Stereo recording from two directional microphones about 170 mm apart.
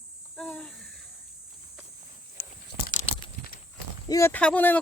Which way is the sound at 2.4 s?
75° left (ahead or behind).